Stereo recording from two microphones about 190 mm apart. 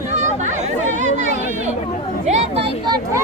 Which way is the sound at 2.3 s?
30° right (ahead or behind).